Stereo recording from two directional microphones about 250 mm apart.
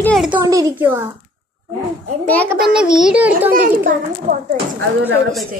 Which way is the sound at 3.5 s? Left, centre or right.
Right.